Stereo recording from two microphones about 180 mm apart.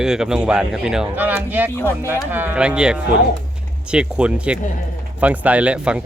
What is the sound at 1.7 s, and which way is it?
Speech, 15° left (ahead or behind).